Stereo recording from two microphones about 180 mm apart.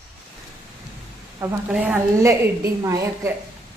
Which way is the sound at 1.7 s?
10° right (ahead or behind).